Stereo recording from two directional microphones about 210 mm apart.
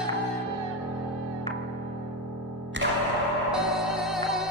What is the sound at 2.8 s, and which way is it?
Music, 60° right (ahead or behind).